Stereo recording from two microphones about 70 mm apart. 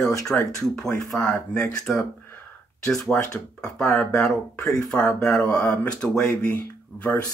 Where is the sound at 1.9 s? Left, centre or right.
Centre.